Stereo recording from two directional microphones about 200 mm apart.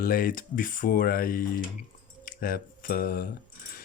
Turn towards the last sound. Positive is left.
turn(degrees=45)  # may be behind; listen again after turning